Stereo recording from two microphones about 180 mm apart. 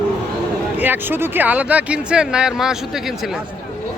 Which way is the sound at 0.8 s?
10° right (ahead or behind).